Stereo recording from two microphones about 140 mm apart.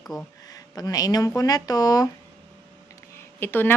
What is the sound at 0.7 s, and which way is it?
Speech, 25° left (ahead or behind).